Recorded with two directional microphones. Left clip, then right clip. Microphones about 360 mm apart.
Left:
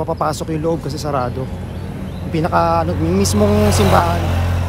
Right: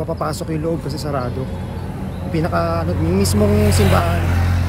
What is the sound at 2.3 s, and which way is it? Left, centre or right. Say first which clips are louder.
Speech: left 5 dB; centre.